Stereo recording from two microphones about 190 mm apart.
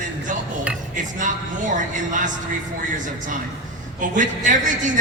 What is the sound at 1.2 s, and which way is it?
Speech, 40° right (ahead or behind).